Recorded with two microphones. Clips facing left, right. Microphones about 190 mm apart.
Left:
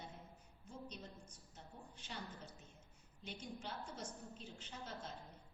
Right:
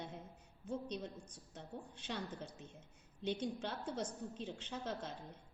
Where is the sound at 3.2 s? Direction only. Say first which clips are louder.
Right 10 dB; 80° right.